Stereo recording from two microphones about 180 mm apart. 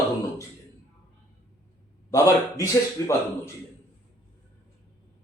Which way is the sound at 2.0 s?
15° left (ahead or behind).